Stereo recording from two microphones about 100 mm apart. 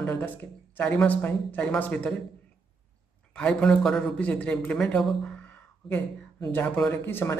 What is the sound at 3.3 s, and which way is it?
A man's voice, 10° left (ahead or behind).